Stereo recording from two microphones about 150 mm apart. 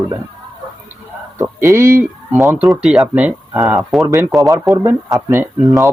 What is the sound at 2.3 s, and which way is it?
Speech, centre (ahead or behind).